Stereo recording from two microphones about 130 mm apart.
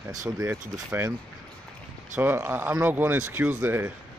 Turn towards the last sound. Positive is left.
turn(degrees=-15)  # may be behind; listen again after turning